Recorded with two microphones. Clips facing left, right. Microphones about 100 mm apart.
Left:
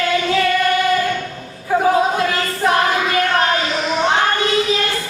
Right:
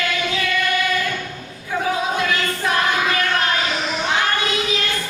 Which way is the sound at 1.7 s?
35° left (ahead or behind).